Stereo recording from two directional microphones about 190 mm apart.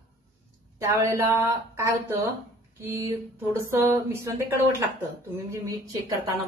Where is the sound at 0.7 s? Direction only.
15° right (ahead or behind).